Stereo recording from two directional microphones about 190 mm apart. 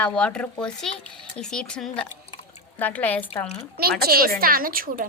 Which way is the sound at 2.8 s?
10° left (ahead or behind).